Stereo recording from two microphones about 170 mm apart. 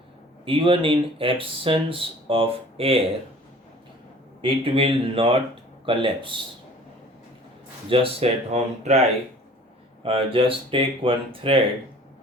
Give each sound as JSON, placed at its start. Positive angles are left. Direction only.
{"t": 0.4, "sound": "speech", "side_deg": -30}
{"t": 4.4, "sound": "speech", "side_deg": -30}
{"t": 7.9, "sound": "speech", "side_deg": -35}